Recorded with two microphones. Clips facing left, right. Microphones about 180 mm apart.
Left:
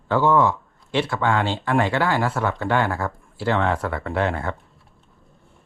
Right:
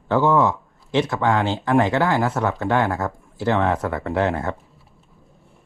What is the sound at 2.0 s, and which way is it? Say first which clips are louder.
Speech: right 2 dB; 20° right (ahead or behind).